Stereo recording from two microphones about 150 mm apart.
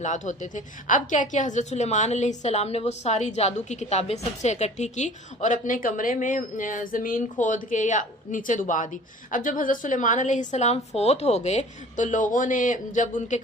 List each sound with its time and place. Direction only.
0.0 s a woman's voice: 55° left (ahead or behind)